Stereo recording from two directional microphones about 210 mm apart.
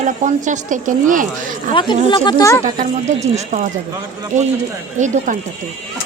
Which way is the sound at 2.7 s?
35° right (ahead or behind).